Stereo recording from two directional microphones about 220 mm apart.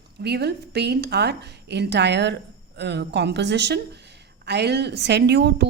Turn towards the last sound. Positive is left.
turn(degrees=-50)  # may be behind; listen again after turning